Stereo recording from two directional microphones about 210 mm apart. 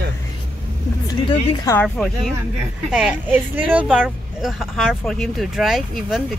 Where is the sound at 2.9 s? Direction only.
5° right (ahead or behind).